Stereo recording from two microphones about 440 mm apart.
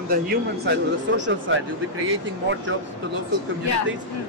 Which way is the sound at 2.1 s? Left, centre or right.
Right.